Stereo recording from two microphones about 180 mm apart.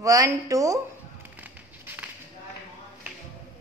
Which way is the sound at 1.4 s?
10° right (ahead or behind).